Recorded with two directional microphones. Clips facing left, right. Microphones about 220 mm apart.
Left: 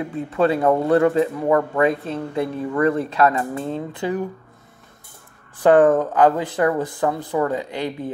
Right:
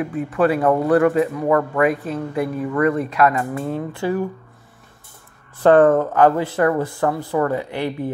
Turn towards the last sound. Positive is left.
turn(degrees=15)  # may be behind; listen again after turning